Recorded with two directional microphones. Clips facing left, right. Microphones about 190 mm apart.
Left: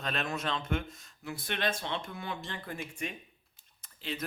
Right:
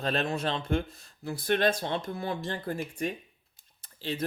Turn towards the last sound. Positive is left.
turn(degrees=-35)  # may be behind; listen again after turning